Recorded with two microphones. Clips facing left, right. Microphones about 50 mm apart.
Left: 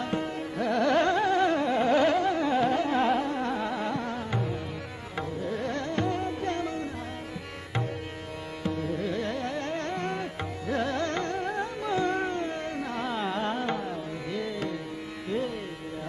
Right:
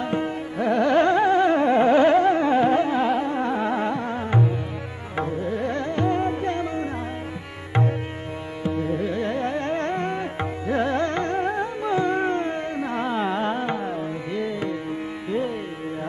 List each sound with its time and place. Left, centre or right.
0.0 s music: centre
2.9 s carnatic music: centre
3.3 s carnatic music: right
5.1 s music: right
8.6 s music: right
12.3 s music: right